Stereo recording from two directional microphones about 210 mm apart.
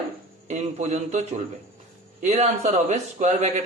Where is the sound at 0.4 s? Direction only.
35° right (ahead or behind).